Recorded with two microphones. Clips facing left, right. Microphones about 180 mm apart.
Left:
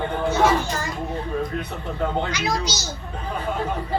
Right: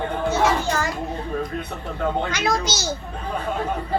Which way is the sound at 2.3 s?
50° right (ahead or behind).